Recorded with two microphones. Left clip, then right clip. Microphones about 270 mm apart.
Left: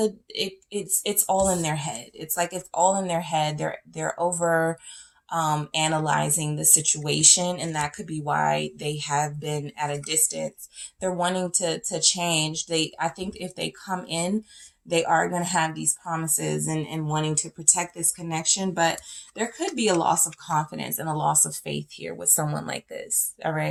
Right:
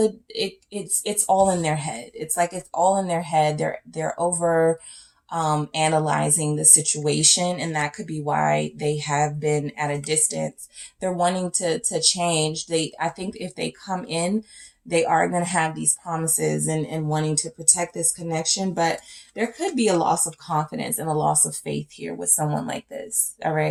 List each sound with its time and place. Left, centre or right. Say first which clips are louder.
0.0 s speech: right 3 dB; left